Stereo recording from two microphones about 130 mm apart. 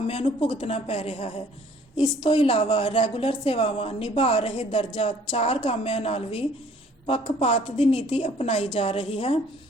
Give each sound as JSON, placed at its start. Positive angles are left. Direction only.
{"t": 0.1, "sound": "a woman's voice", "side_deg": 50}
{"t": 2.0, "sound": "a woman's voice", "side_deg": 40}